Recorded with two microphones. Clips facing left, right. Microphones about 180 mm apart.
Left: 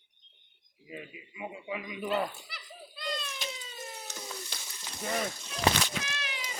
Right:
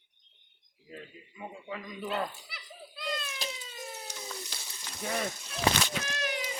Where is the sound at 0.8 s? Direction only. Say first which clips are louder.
Left 2 dB; 10° left (ahead or behind).